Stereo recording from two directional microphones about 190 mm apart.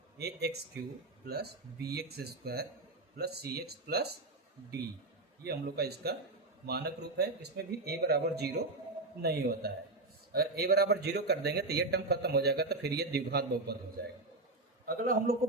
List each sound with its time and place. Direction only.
0.2 s speech: 60° right (ahead or behind)
5.4 s speech: 55° right (ahead or behind)
14.8 s a man's voice: 50° right (ahead or behind)